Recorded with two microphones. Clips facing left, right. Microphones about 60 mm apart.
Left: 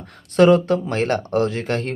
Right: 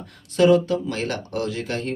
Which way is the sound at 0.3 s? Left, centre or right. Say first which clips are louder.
Left 3 dB; left.